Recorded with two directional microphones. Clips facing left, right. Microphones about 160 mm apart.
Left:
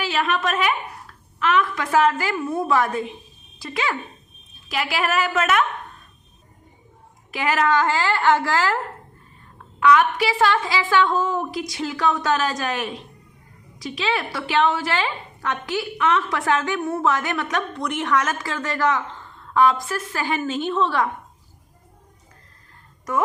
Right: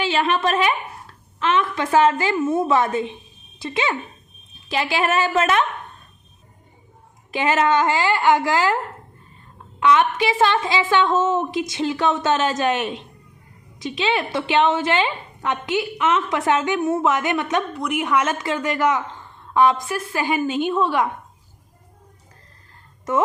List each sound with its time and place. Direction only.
0.0 s a woman's voice: 30° right (ahead or behind)
7.3 s a woman's voice: 25° right (ahead or behind)
9.8 s a woman's voice: 25° right (ahead or behind)
17.7 s a woman's voice: 5° right (ahead or behind)
18.2 s a woman's voice: 20° right (ahead or behind)
23.1 s a woman's voice: 25° right (ahead or behind)